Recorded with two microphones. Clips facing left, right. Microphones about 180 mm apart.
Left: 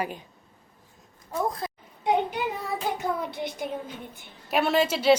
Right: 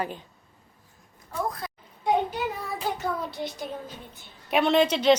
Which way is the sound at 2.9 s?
15° left (ahead or behind).